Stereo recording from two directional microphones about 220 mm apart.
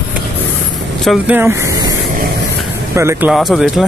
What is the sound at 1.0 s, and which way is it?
Speech, 5° right (ahead or behind).